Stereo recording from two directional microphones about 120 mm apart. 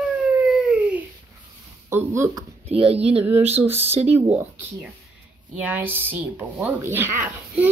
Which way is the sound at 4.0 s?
60° right (ahead or behind).